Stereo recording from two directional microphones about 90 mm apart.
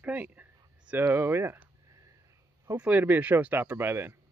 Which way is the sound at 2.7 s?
15° right (ahead or behind).